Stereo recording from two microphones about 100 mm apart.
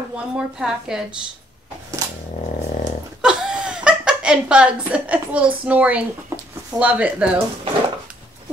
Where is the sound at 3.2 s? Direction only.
5° right (ahead or behind).